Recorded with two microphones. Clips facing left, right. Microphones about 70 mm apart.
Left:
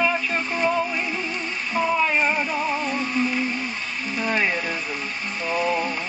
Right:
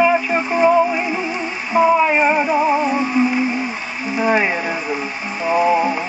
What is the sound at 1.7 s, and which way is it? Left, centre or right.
Music, centre.